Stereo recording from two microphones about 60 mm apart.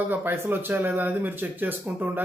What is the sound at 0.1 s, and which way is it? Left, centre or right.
Speech, right.